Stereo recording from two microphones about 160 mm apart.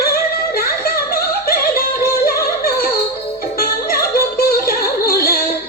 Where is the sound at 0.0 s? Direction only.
70° left (ahead or behind).